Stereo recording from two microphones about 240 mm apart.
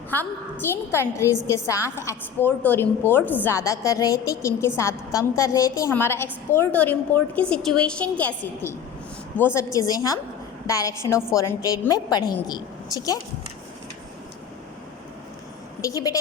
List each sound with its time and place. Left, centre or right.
0.1 s a woman's voice: centre
15.8 s a woman's voice: centre